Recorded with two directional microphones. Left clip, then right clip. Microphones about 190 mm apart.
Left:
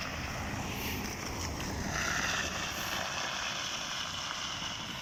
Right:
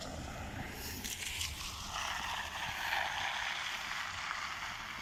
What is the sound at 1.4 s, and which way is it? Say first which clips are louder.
Vehicle: left 4 dB; 35° left (ahead or behind).